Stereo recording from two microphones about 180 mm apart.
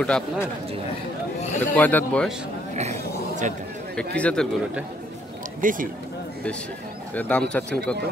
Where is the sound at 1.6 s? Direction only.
10° left (ahead or behind).